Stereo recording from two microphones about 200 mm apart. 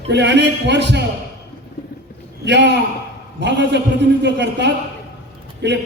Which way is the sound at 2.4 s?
60° right (ahead or behind).